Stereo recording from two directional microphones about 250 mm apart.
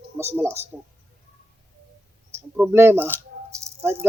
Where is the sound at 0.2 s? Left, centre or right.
Centre.